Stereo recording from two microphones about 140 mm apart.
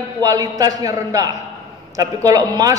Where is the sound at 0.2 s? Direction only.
25° right (ahead or behind).